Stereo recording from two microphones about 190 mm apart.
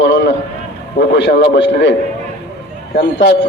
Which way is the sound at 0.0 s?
65° left (ahead or behind).